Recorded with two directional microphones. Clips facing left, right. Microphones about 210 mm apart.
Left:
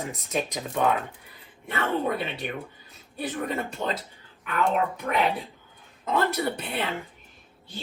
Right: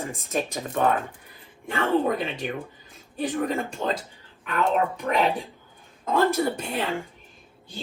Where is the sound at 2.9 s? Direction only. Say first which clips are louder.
Right 5 dB; 50° right (ahead or behind).